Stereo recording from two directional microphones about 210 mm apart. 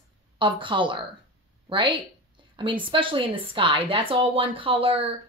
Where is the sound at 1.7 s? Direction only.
25° right (ahead or behind).